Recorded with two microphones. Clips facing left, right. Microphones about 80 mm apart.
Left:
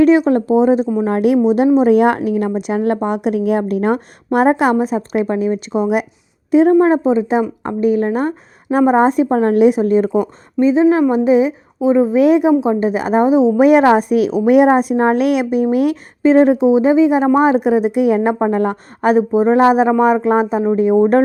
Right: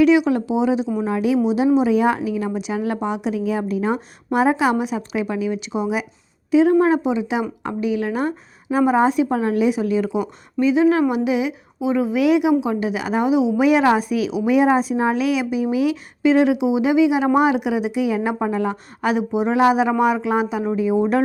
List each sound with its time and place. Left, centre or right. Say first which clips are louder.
0.0 s a woman's voice: left 4 dB; left
1.0 s a woman's voice: left 6 dB; left
6.7 s a woman's voice: left 5 dB; left
10.6 s a woman's voice: left 4 dB; left
19.1 s a woman's voice: left 7 dB; left
20.7 s a woman's voice: left 7 dB; left